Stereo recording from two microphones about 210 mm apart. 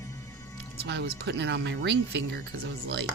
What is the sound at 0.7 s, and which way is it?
Speech, 50° right (ahead or behind).